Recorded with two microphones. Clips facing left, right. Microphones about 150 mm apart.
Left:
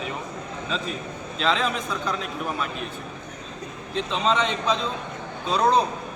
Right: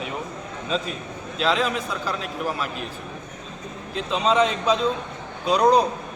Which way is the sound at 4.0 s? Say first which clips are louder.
Right 3 dB; 5° right (ahead or behind).